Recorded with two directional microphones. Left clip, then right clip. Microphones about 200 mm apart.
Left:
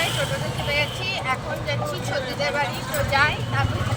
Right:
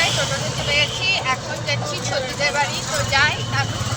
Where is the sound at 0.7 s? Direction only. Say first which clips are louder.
Right 6 dB; 5° left (ahead or behind).